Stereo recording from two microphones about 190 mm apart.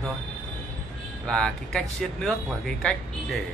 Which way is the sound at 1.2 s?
5° left (ahead or behind).